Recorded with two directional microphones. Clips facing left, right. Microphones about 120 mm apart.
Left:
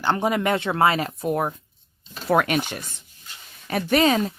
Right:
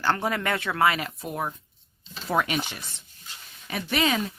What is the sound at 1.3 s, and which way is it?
Speech, 55° left (ahead or behind).